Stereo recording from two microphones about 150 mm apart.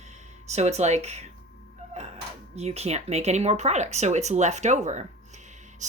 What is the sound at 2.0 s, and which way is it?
Music, 50° right (ahead or behind).